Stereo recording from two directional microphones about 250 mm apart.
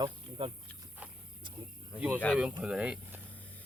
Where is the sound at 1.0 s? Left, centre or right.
Centre.